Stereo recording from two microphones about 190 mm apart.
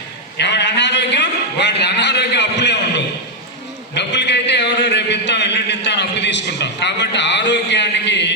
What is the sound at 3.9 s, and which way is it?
A man's voice, 65° left (ahead or behind).